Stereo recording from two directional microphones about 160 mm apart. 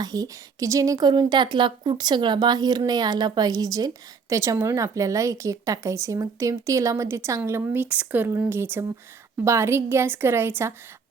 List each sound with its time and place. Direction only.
0.0 s a woman's voice: 25° right (ahead or behind)